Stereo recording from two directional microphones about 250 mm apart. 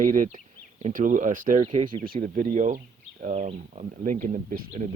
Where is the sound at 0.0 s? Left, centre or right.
Right.